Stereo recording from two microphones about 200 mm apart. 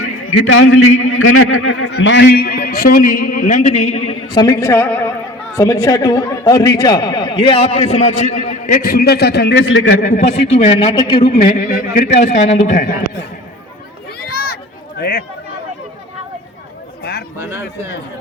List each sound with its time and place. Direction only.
0.0 s a man's voice: 90° left
1.9 s a man's voice: 65° left (ahead or behind); by 4.4 s 30° left (ahead or behind)
4.4 s a woman's voice: 15° left (ahead or behind); by 10.0 s 70° left (ahead or behind)
10.0 s speech: 40° left (ahead or behind); by 11.2 s 20° left (ahead or behind)
11.2 s a man's voice: 50° left (ahead or behind)
14.3 s a sound: 50° left (ahead or behind)
17.0 s a sound: 55° left (ahead or behind)
17.3 s speech: 15° right (ahead or behind)